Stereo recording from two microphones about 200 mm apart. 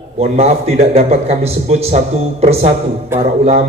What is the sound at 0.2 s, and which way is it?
A man's voice, 35° right (ahead or behind).